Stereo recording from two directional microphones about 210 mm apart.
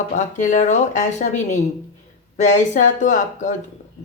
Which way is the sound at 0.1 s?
35° left (ahead or behind).